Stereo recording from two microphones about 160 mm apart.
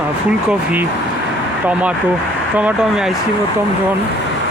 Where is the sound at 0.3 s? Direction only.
10° right (ahead or behind).